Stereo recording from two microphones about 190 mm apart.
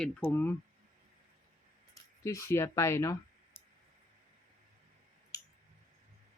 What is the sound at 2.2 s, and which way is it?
Speech, 15° left (ahead or behind).